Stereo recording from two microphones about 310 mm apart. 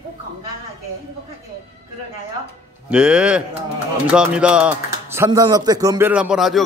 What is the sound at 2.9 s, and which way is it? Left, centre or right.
Speech, centre.